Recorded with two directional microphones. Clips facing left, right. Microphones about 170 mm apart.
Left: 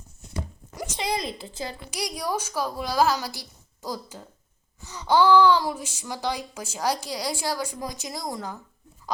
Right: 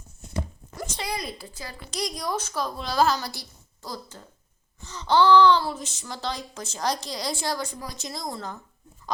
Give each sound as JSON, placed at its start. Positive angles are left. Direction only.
{"t": 0.8, "sound": "a woman's voice", "side_deg": 20}
{"t": 1.9, "sound": "speech", "side_deg": 10}
{"t": 9.1, "sound": "dog", "side_deg": 10}